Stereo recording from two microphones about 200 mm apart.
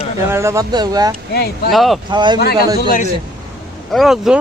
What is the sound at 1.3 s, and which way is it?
Speech, 55° left (ahead or behind).